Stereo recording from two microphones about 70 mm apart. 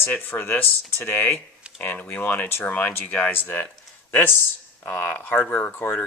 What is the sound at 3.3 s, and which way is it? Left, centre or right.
Speech, left.